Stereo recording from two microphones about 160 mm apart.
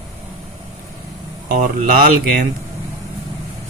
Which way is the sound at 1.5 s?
55° right (ahead or behind).